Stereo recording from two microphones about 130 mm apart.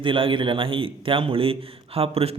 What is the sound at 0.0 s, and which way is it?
A man's voice, 40° right (ahead or behind).